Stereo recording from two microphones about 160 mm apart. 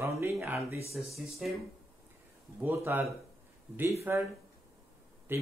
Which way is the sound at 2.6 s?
10° right (ahead or behind).